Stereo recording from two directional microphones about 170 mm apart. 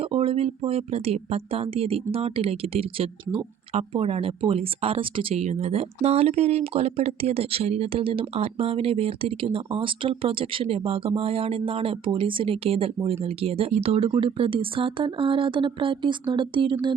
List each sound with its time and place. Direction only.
0.0 s speech: 35° right (ahead or behind)